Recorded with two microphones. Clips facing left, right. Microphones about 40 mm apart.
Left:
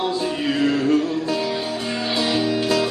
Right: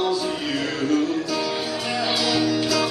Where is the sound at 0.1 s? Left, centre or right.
Left.